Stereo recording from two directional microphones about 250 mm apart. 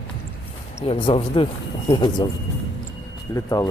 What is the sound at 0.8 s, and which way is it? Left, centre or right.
Speech, left.